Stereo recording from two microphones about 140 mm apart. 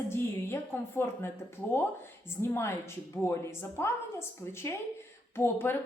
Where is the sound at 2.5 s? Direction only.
20° left (ahead or behind).